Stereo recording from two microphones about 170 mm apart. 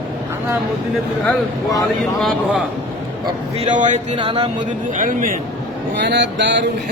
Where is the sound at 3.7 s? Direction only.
45° right (ahead or behind).